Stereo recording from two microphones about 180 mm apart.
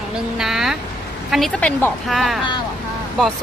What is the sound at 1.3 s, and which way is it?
Speech, centre (ahead or behind).